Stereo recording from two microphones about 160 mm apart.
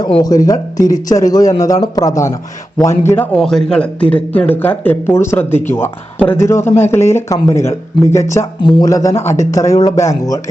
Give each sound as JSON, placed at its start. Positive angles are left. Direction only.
{"t": 0.0, "sound": "a man's voice", "side_deg": 25}
{"t": 3.3, "sound": "a man's voice", "side_deg": 5}